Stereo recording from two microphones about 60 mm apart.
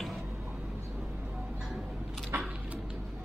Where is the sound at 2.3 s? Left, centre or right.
Right.